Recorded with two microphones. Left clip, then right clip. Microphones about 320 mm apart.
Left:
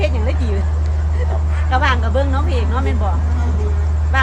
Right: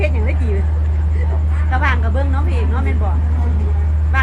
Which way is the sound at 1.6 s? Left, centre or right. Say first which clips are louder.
Left 2 dB; left.